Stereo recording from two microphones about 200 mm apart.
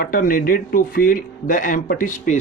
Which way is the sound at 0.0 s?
45° left (ahead or behind).